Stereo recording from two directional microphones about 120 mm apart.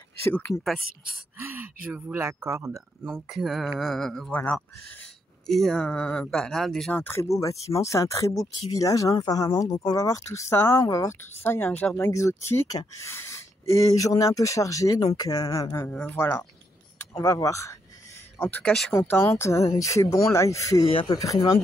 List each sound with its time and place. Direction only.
0.2 s speech: 15° left (ahead or behind)
1.4 s gasp: 20° right (ahead or behind)
2.1 s speech: 20° right (ahead or behind)
3.1 s speech: 5° right (ahead or behind); by 5.0 s 15° left (ahead or behind)
5.5 s speech: 5° left (ahead or behind)
7.0 s speech: 20° left (ahead or behind)
15.9 s speech: 15° left (ahead or behind)
17.1 s speech: 30° left (ahead or behind)
18.4 s speech: 10° left (ahead or behind)
19.0 s speech: 20° left (ahead or behind)